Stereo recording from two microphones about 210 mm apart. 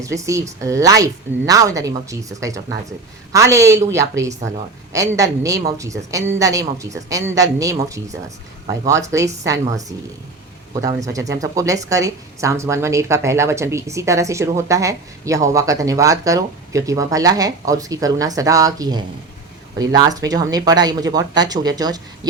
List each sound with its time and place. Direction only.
0.0 s speech: 15° right (ahead or behind)